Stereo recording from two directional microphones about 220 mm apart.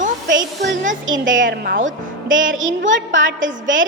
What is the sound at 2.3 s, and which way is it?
A woman's voice, 60° right (ahead or behind).